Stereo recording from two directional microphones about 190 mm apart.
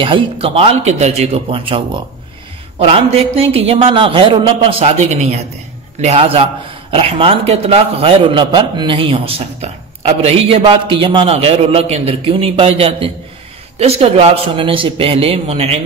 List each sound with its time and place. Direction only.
0.0 s a man's voice: 25° right (ahead or behind)